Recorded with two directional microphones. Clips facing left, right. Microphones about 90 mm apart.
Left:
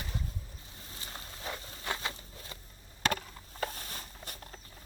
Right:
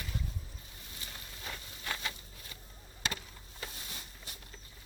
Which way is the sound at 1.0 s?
30° left (ahead or behind).